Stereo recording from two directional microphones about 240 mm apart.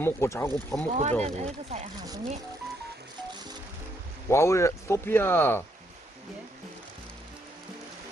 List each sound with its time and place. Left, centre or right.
0.0 s speech: centre
1.2 s speech: right
2.0 s speech: centre
4.3 s speech: centre